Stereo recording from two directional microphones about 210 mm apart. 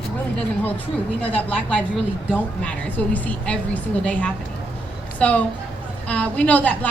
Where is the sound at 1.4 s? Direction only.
5° left (ahead or behind).